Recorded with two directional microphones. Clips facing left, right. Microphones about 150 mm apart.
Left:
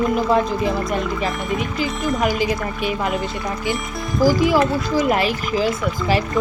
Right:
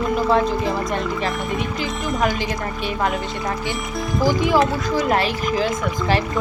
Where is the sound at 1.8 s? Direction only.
5° left (ahead or behind).